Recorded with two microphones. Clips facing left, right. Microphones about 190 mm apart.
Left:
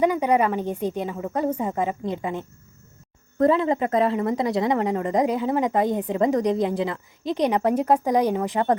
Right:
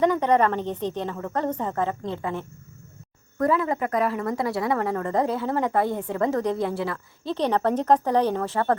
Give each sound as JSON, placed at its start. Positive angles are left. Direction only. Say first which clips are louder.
{"t": 0.0, "sound": "a woman's voice", "louder": "even", "side_deg": 10}